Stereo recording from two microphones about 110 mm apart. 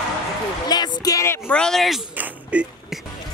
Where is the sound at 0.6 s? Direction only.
40° left (ahead or behind).